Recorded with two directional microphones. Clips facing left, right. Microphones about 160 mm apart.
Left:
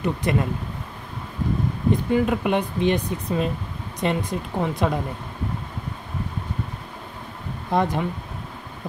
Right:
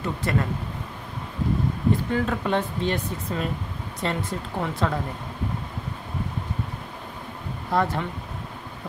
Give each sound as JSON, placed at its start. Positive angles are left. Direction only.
{"t": 0.0, "sound": "speech", "side_deg": 20}
{"t": 1.9, "sound": "speech", "side_deg": 15}
{"t": 7.7, "sound": "speech", "side_deg": 20}